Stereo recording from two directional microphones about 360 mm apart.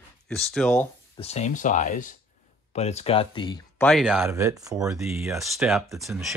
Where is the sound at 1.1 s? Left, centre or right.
Centre.